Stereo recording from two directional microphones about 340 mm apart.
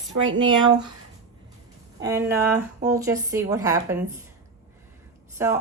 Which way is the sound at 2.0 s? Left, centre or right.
Centre.